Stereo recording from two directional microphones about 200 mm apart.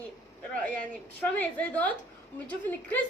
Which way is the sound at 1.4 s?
5° left (ahead or behind).